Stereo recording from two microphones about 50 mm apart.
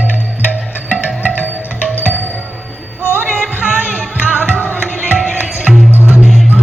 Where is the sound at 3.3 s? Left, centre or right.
Centre.